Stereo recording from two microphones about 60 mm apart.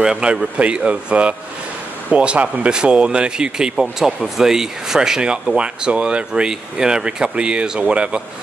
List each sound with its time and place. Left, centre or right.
0.0 s speech: centre